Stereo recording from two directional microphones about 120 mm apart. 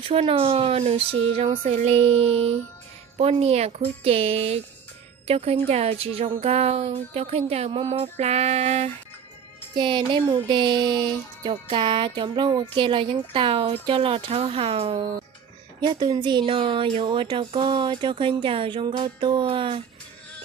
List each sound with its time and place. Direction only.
0.1 s speech: 55° right (ahead or behind)
9.7 s speech: 40° right (ahead or behind)
15.8 s speech: 35° right (ahead or behind)